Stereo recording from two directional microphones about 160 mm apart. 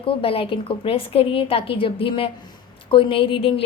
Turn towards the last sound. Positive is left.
turn(degrees=35)  # may be behind; listen again after turning